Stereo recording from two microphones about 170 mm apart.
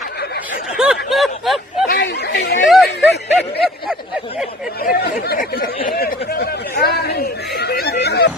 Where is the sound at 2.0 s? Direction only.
75° left (ahead or behind).